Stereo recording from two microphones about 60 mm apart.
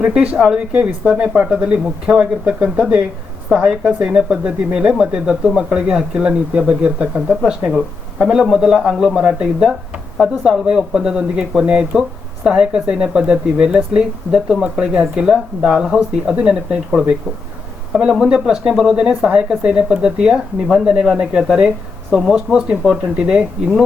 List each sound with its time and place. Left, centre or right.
0.0 s speech: centre
22.9 s speech: centre